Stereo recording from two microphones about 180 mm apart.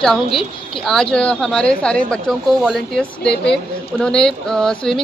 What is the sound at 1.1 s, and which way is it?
Speech, 5° left (ahead or behind).